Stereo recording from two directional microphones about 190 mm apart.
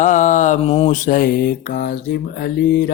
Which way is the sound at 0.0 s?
40° left (ahead or behind).